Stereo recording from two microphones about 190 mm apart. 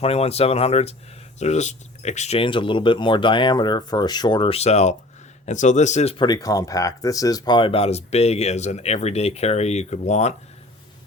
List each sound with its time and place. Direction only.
0.0 s speech: 30° left (ahead or behind)
6.2 s speech: 20° left (ahead or behind); by 10.3 s 35° left (ahead or behind)